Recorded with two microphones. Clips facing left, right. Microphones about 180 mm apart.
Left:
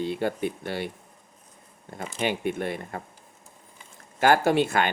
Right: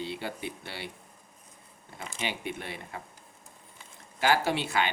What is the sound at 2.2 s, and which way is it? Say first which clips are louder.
Speech: left 9 dB; 50° left (ahead or behind).